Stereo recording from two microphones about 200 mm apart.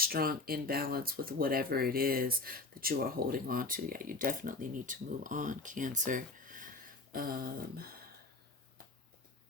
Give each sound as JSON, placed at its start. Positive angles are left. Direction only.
{"t": 0.0, "sound": "speech", "side_deg": -45}